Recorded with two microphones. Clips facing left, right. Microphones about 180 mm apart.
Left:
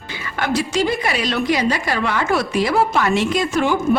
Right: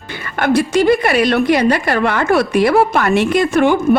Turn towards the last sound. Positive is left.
turn(degrees=-60)  # may be behind; listen again after turning